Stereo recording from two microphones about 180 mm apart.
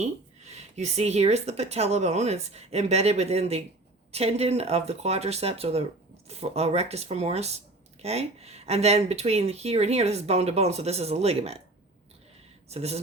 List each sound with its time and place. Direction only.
0.5 s speech: 35° right (ahead or behind)
12.6 s speech: 35° right (ahead or behind)